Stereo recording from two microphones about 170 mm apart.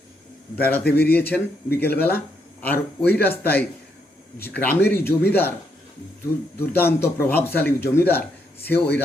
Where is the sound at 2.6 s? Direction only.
10° left (ahead or behind).